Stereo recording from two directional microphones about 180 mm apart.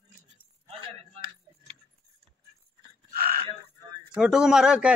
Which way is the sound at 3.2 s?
55° right (ahead or behind).